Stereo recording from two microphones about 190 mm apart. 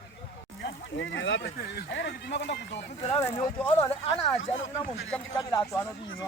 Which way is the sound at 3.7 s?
30° left (ahead or behind).